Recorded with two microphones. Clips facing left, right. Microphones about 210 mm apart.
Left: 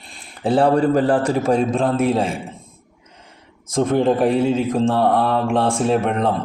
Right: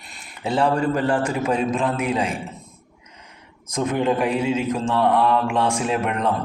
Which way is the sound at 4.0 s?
35° left (ahead or behind).